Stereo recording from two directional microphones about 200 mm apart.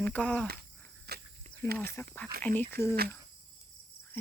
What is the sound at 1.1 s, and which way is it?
Snake, 55° right (ahead or behind).